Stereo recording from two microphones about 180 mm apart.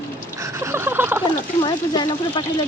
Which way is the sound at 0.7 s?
15° right (ahead or behind).